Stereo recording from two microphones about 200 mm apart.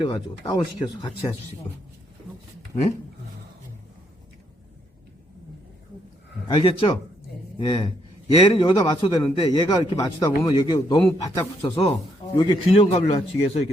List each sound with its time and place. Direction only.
0.0 s a man's voice: 25° left (ahead or behind)
6.6 s a man's voice: 25° left (ahead or behind)